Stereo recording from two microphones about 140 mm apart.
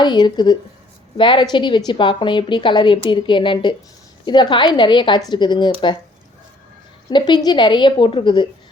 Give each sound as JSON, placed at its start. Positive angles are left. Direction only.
{"t": 0.0, "sound": "a woman's voice", "side_deg": 35}
{"t": 7.1, "sound": "a woman's voice", "side_deg": 35}